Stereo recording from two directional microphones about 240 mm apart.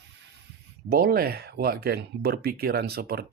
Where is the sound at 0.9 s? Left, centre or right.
Right.